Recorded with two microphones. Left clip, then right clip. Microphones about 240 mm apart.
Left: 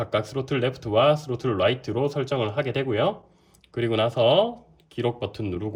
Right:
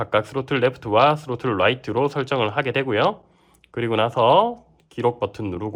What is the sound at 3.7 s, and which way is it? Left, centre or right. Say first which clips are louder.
Speech: right 3 dB; centre.